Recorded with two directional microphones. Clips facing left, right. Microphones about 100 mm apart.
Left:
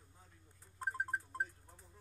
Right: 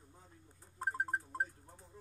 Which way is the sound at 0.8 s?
25° right (ahead or behind).